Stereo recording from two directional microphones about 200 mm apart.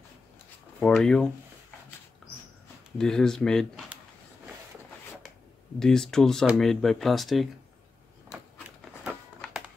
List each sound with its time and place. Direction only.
0.7 s speech: 5° left (ahead or behind)
3.0 s speech: 5° left (ahead or behind)
5.8 s speech: centre (ahead or behind)
8.3 s typewriter: 5° right (ahead or behind)